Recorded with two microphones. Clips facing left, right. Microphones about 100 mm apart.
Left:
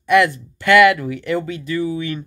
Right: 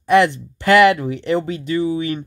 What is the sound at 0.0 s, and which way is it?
Speech, 30° right (ahead or behind).